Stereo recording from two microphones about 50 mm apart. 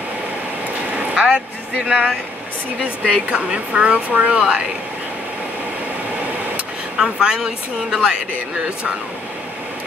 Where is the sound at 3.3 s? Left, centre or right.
Centre.